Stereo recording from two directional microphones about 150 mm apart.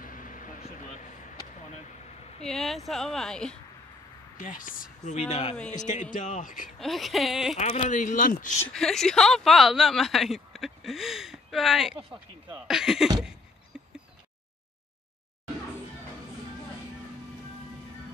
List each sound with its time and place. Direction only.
0.0 s vehicle: 65° left (ahead or behind)
2.4 s speech: centre (ahead or behind)
4.4 s speech: 60° left (ahead or behind)
5.3 s speech: 50° left (ahead or behind); by 6.7 s 65° left (ahead or behind)
6.8 s speech: centre (ahead or behind)
7.5 s speech: 50° left (ahead or behind); by 8.5 s 65° left (ahead or behind)
8.6 s speech: 5° left (ahead or behind)
13.7 s a sound: 5° right (ahead or behind)